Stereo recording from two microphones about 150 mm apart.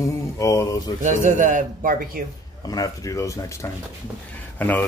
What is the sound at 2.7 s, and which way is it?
Speech, 25° left (ahead or behind).